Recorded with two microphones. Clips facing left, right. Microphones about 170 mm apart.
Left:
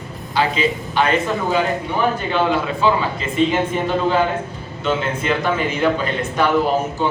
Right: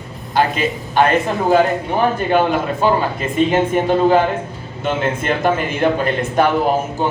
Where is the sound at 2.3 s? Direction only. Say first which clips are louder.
Right 3 dB; 50° right (ahead or behind).